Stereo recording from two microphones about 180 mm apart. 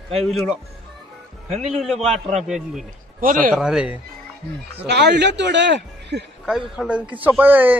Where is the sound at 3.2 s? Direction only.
50° right (ahead or behind).